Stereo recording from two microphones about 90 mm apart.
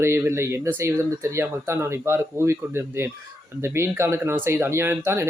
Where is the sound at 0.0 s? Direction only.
30° right (ahead or behind).